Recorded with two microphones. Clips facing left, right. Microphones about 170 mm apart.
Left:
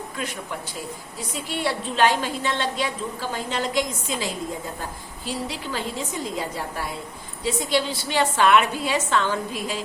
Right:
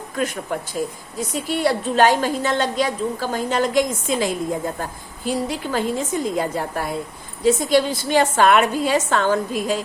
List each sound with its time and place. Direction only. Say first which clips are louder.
0.2 s a woman's voice: right 9 dB; 45° right (ahead or behind)